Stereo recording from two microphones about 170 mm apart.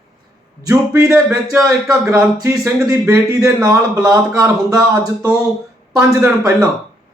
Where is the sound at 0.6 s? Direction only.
20° right (ahead or behind).